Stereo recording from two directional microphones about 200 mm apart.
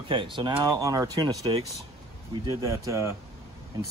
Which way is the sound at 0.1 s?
25° right (ahead or behind).